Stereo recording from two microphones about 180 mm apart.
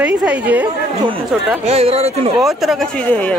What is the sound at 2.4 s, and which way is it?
Speech, centre (ahead or behind).